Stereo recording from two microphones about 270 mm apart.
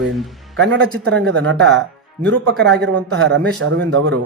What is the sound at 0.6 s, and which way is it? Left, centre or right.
Speech, right.